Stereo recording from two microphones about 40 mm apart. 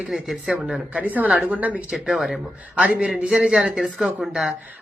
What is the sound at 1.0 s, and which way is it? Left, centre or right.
Speech, right.